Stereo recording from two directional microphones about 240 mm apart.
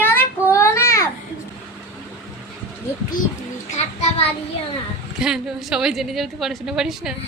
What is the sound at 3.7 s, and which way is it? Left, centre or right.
Child singing, left.